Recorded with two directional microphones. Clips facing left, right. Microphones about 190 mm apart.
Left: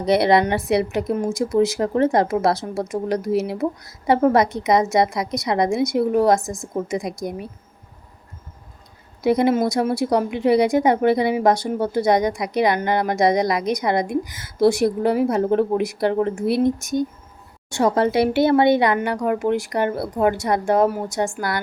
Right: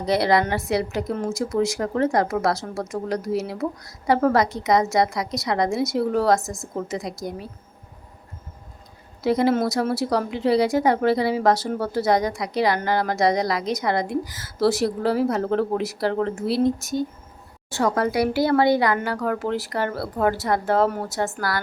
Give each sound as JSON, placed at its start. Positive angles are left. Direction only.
{"t": 0.0, "sound": "a woman's voice", "side_deg": 20}
{"t": 6.4, "sound": "a woman's voice", "side_deg": 0}
{"t": 6.7, "sound": "a woman's voice", "side_deg": 15}
{"t": 9.2, "sound": "a woman's voice", "side_deg": 20}
{"t": 17.7, "sound": "a woman's voice", "side_deg": 25}